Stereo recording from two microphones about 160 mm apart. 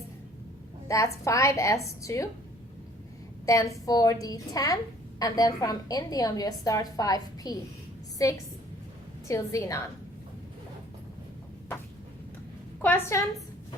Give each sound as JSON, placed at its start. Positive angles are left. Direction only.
{"t": 0.9, "sound": "a woman's voice", "side_deg": 20}
{"t": 3.4, "sound": "a woman's voice", "side_deg": 20}
{"t": 12.8, "sound": "a woman's voice", "side_deg": 15}